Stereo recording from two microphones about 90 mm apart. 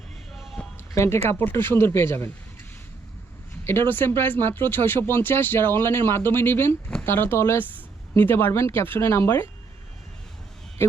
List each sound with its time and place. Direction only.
0.3 s a sound: centre (ahead or behind)
0.9 s speech: 35° left (ahead or behind)
3.6 s speech: 25° left (ahead or behind)
10.8 s speech: 25° left (ahead or behind)